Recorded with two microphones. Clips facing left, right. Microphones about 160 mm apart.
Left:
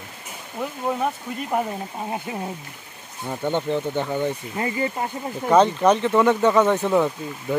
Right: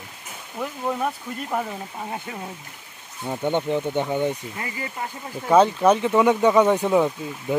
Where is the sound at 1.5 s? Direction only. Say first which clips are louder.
Left 3 dB; 15° left (ahead or behind).